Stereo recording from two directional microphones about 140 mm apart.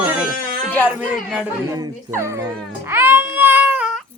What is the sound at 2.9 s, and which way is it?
Baby cry, 15° right (ahead or behind).